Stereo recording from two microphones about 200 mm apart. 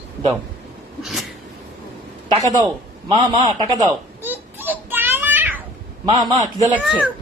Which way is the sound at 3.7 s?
15° right (ahead or behind).